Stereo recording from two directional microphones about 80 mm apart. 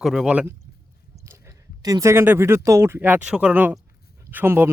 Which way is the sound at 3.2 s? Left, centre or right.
Centre.